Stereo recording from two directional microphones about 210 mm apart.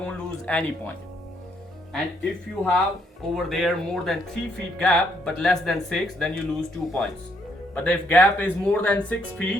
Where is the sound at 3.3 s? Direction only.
Centre (ahead or behind).